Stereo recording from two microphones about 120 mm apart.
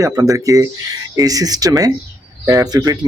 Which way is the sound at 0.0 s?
25° right (ahead or behind).